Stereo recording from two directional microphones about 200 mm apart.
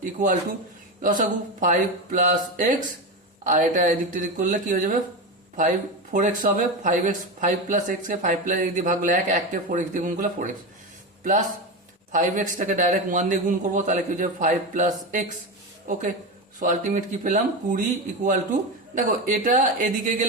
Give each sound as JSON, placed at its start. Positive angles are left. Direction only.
{"t": 0.0, "sound": "a man's voice", "side_deg": -40}